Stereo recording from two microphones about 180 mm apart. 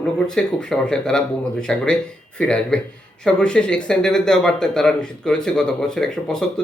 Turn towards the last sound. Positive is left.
turn(degrees=5)  # may be behind; listen again after turning